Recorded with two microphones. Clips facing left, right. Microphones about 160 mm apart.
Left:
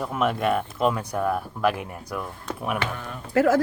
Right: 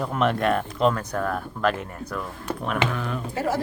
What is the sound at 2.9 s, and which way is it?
Speech, 90° right.